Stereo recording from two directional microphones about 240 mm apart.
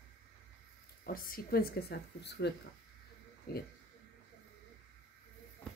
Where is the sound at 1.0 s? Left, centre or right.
Left.